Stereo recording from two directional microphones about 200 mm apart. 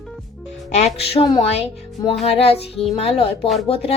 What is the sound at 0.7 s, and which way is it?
Speech, 30° left (ahead or behind).